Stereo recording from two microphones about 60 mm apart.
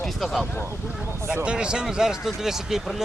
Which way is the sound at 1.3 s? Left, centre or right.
Centre.